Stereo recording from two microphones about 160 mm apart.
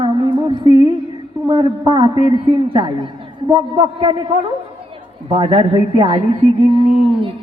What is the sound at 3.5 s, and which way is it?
A man's voice, 30° right (ahead or behind).